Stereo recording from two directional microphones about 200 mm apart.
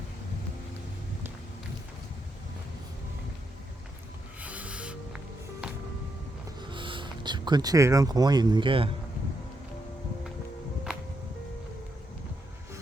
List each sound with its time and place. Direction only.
4.4 s music: 5° right (ahead or behind)
6.7 s speech: 25° right (ahead or behind)